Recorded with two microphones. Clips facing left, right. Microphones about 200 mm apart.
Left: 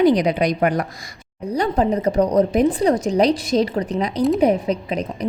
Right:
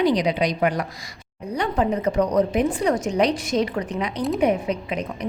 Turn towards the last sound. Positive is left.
turn(degrees=35)  # may be behind; listen again after turning